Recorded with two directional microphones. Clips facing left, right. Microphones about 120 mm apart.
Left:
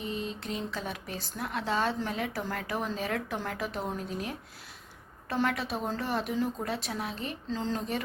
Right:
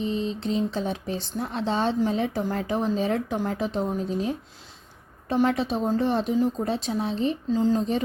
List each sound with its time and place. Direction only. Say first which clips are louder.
0.0 s speech: right 8 dB; 25° right (ahead or behind)
7.5 s speech: right 9 dB; 15° right (ahead or behind)